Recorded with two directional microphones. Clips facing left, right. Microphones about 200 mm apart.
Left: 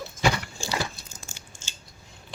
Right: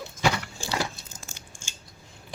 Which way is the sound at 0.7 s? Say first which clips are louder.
Right 1 dB; 20° right (ahead or behind).